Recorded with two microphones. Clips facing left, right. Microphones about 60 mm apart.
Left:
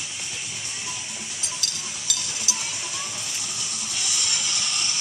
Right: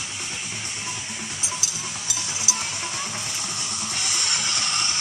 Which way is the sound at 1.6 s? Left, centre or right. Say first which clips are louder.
Right 2 dB; left.